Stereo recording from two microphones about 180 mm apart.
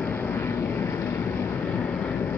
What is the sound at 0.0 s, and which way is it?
Vehicle, 10° left (ahead or behind).